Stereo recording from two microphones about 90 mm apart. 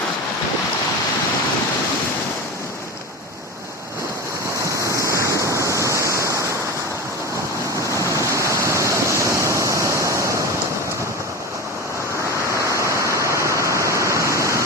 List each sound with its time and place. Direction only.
4.8 s waves: 35° right (ahead or behind)
5.4 s waterfall: 35° right (ahead or behind)
8.1 s waves: 35° right (ahead or behind)
13.2 s waterfall: 35° right (ahead or behind)